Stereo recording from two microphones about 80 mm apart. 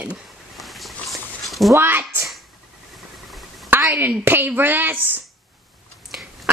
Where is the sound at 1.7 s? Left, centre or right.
Right.